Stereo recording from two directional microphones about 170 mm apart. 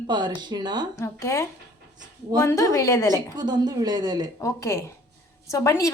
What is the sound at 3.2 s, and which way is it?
Speech, 25° right (ahead or behind).